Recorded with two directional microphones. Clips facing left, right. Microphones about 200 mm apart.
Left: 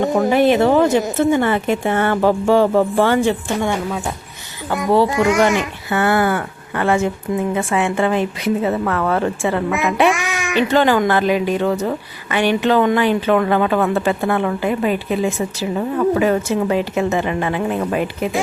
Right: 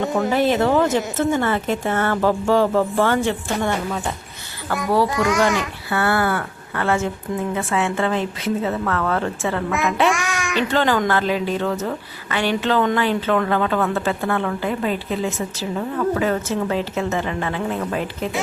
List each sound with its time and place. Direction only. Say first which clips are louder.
0.2 s a woman's voice: left 4 dB; 15° left (ahead or behind)
4.7 s a child's voice: left 4 dB; 25° left (ahead or behind)